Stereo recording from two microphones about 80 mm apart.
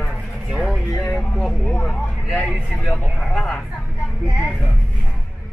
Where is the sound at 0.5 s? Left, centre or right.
Centre.